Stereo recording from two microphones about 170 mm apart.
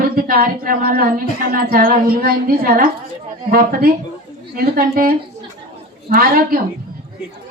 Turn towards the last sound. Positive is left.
turn(degrees=-60)  # may be behind; listen again after turning